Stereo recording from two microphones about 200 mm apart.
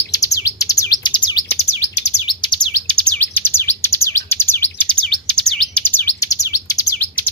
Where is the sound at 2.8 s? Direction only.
10° left (ahead or behind).